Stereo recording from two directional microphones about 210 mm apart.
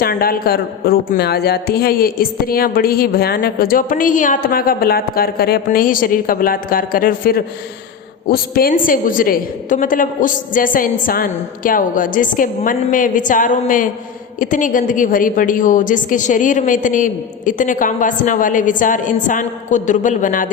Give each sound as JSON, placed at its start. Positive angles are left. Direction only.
{"t": 0.0, "sound": "a woman's voice", "side_deg": 45}